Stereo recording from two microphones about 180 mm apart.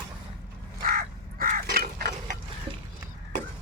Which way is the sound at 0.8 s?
55° right (ahead or behind).